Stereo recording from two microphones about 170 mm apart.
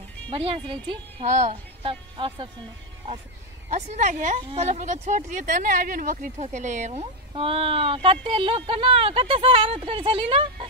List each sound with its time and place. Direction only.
0.3 s speech: 30° right (ahead or behind)
1.2 s speech: 45° right (ahead or behind)
3.7 s a woman's voice: 45° right (ahead or behind)